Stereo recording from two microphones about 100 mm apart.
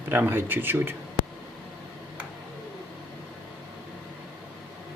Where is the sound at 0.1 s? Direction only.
20° right (ahead or behind).